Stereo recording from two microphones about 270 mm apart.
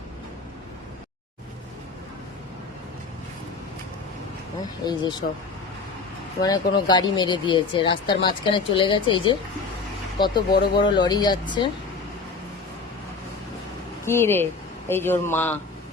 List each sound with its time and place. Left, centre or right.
4.9 s speech: centre
6.4 s speech: centre
14.0 s speech: centre